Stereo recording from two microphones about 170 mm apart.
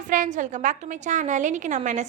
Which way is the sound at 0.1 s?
50° right (ahead or behind).